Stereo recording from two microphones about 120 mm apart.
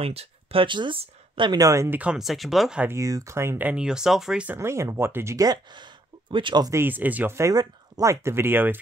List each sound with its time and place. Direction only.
0.0 s speech: 55° right (ahead or behind); by 1.9 s 30° right (ahead or behind)
1.9 s speech: 10° right (ahead or behind)
2.8 s speech: 25° right (ahead or behind); by 4.6 s 5° right (ahead or behind)
4.6 s speech: 25° right (ahead or behind); by 6.7 s 40° right (ahead or behind)
6.7 s speech: 15° right (ahead or behind)